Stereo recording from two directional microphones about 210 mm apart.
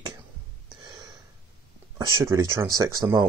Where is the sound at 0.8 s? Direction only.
20° right (ahead or behind).